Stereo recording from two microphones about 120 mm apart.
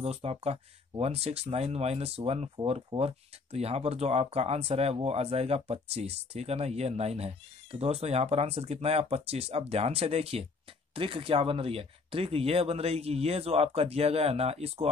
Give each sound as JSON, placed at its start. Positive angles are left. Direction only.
{"t": 0.0, "sound": "speech", "side_deg": -60}
{"t": 2.5, "sound": "speech", "side_deg": -50}